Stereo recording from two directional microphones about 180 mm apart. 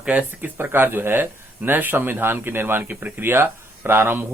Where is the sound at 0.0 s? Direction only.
10° right (ahead or behind).